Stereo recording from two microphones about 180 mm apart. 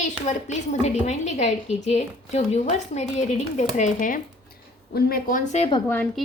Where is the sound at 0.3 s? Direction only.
40° left (ahead or behind).